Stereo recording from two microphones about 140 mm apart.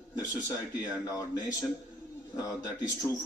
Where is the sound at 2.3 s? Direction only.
25° left (ahead or behind).